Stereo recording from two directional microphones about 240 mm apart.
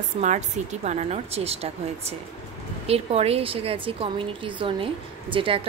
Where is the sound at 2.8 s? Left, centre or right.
Right.